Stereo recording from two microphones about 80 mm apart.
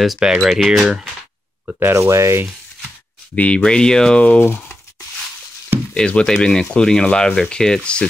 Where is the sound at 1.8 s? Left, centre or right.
Right.